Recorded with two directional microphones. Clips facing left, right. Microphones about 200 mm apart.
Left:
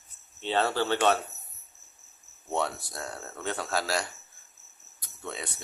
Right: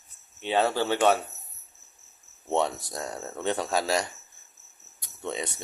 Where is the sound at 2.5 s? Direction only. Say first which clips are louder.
Right 4 dB; 20° right (ahead or behind).